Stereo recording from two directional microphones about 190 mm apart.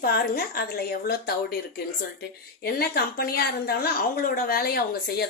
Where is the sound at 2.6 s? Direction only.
55° left (ahead or behind).